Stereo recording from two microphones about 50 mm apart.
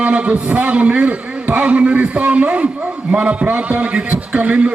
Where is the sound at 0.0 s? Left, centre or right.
Right.